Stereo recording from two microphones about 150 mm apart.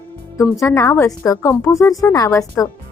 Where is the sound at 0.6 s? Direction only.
20° left (ahead or behind).